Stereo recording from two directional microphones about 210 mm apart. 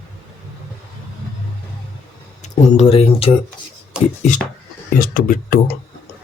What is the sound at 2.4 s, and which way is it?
Speech, 30° left (ahead or behind).